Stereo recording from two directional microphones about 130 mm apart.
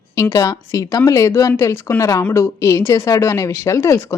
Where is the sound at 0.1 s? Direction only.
25° left (ahead or behind).